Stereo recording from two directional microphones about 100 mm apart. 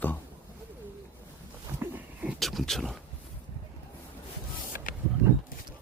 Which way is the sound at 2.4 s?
Centre (ahead or behind).